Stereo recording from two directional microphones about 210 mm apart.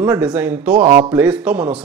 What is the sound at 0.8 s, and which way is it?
Speech, 25° right (ahead or behind).